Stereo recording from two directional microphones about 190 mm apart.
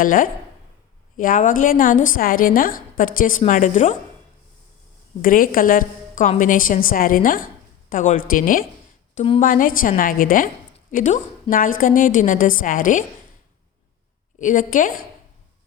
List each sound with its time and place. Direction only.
0.0 s a woman's voice: 50° left (ahead or behind)
5.2 s a woman's voice: 45° left (ahead or behind)
14.3 s a woman's voice: 45° left (ahead or behind)